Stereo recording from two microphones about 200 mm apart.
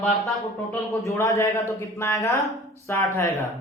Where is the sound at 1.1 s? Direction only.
15° left (ahead or behind).